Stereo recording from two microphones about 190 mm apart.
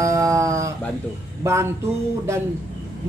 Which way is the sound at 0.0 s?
15° right (ahead or behind).